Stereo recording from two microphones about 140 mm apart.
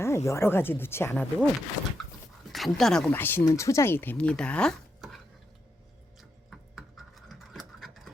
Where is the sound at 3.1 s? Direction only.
15° left (ahead or behind).